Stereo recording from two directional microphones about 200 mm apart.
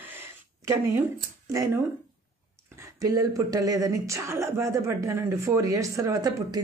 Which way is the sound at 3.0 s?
15° right (ahead or behind).